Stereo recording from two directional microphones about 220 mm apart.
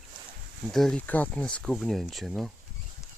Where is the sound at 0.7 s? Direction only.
5° left (ahead or behind).